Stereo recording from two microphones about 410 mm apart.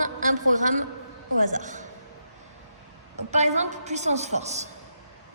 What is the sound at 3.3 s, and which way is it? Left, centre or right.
A woman's voice, centre.